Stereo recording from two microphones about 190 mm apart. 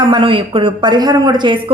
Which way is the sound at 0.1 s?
25° right (ahead or behind).